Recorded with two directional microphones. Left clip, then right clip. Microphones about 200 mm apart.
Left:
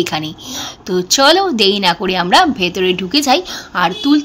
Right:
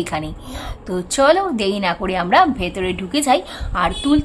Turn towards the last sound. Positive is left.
turn(degrees=15)  # may be behind; listen again after turning